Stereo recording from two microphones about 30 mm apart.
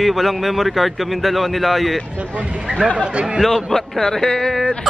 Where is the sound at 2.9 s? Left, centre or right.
Right.